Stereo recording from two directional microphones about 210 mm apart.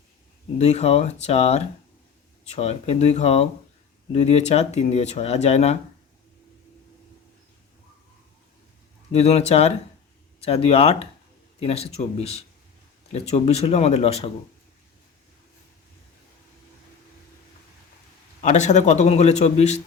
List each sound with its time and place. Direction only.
0.6 s speech: 30° left (ahead or behind)
9.1 s speech: 30° left (ahead or behind)
18.3 s speech: 35° left (ahead or behind)